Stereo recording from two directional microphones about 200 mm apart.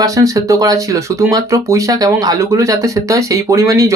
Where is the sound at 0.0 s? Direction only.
15° right (ahead or behind).